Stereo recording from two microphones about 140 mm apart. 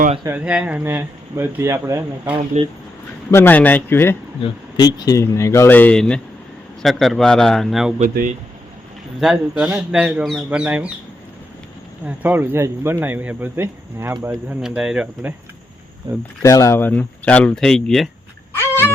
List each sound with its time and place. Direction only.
0.3 s speech: 10° right (ahead or behind)
2.5 s speech: 50° right (ahead or behind)
3.3 s speech: 15° left (ahead or behind)
4.4 s a man's voice: 35° left (ahead or behind); by 7.9 s centre (ahead or behind)
7.9 s speech: 70° right (ahead or behind)
9.2 s speech: 5° right (ahead or behind)
12.0 s a man's voice: 15° right (ahead or behind)
16.4 s speech: 20° left (ahead or behind); by 18.1 s 5° left (ahead or behind)
18.5 s dog: 15° left (ahead or behind)